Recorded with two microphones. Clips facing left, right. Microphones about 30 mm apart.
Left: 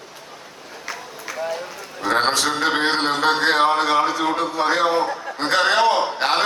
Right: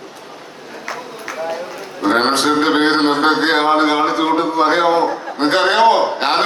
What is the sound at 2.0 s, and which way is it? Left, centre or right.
Speech, right.